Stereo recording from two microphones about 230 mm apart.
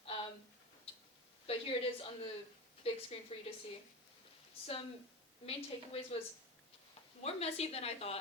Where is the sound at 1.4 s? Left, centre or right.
Left.